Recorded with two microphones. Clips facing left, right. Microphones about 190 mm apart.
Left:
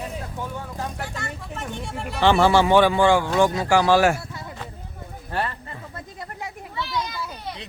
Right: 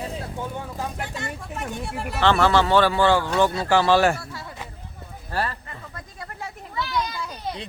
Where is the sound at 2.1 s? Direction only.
15° left (ahead or behind).